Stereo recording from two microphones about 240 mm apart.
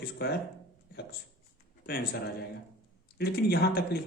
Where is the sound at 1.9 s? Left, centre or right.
Left.